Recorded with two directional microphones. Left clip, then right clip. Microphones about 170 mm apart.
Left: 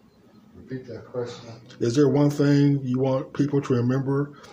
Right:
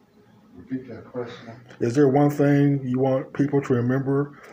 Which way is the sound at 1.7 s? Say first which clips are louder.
Right 1 dB; 5° left (ahead or behind).